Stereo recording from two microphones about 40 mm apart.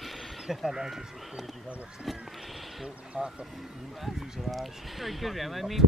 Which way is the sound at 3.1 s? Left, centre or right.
Right.